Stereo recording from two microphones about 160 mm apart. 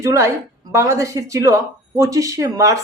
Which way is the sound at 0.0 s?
20° right (ahead or behind).